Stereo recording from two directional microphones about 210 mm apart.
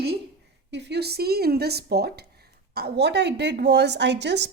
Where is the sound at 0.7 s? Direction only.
55° right (ahead or behind).